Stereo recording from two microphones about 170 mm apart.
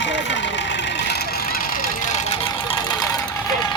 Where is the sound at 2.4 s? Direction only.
30° left (ahead or behind).